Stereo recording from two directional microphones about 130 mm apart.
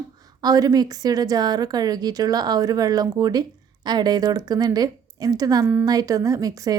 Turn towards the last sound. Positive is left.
turn(degrees=-25)  # may be behind; listen again after turning